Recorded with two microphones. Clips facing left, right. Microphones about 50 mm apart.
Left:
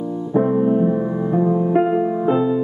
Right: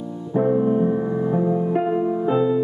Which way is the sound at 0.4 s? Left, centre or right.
Centre.